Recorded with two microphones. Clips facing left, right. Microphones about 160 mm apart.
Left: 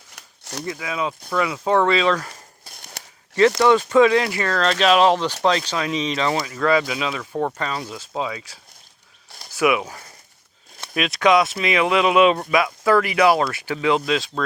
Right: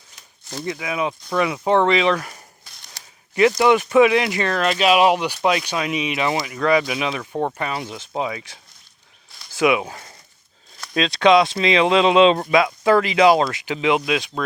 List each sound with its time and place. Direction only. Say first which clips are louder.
0.6 s speech: right 2 dB; 20° right (ahead or behind)
2.6 s a sound: left 5 dB; 55° left (ahead or behind)
3.7 s speech: even; 15° right (ahead or behind)
9.6 s speech: right 1 dB; 25° right (ahead or behind)